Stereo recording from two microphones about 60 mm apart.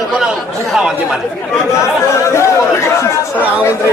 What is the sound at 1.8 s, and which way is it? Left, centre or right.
Chatter, left.